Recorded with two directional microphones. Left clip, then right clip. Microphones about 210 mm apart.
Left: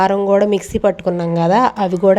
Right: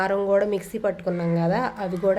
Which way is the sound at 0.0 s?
30° left (ahead or behind).